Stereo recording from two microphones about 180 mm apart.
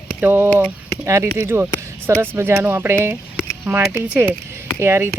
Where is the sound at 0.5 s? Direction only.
10° left (ahead or behind).